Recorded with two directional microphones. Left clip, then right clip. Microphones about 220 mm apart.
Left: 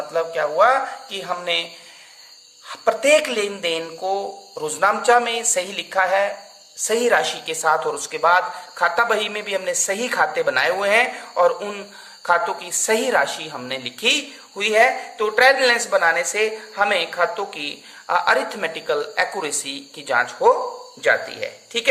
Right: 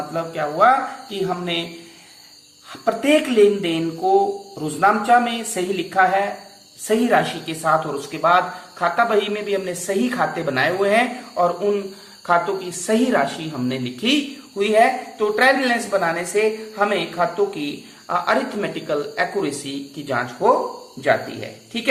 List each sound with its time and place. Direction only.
0.1 s a woman's voice: 45° left (ahead or behind)
2.6 s a woman's voice: 50° left (ahead or behind)